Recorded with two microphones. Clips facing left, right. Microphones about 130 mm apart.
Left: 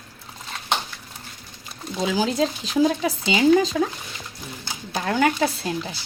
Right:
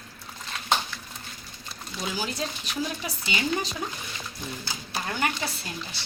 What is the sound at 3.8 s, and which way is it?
Speech, 90° left.